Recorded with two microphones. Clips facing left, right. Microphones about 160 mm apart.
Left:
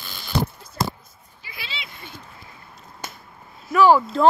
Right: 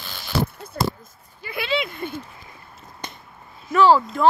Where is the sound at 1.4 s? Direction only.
55° right (ahead or behind).